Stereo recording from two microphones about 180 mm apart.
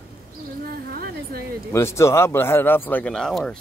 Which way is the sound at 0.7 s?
55° right (ahead or behind).